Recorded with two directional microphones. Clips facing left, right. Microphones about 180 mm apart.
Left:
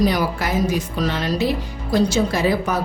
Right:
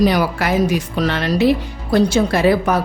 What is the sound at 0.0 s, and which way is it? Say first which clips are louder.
A woman's voice: right 3 dB; 70° right (ahead or behind).